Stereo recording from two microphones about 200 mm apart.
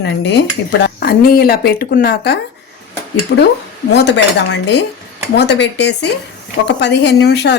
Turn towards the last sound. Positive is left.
turn(degrees=55)  # may be behind; listen again after turning